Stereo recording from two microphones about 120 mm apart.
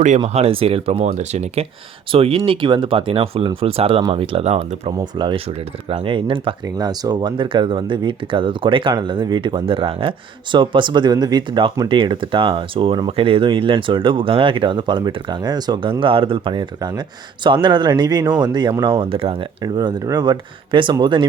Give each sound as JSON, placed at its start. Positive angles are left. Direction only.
{"t": 0.3, "sound": "speech", "side_deg": -55}
{"t": 2.1, "sound": "speech", "side_deg": -55}
{"t": 5.1, "sound": "speech", "side_deg": -45}
{"t": 6.7, "sound": "speech", "side_deg": -35}
{"t": 18.9, "sound": "speech", "side_deg": -50}
{"t": 19.6, "sound": "speech", "side_deg": -35}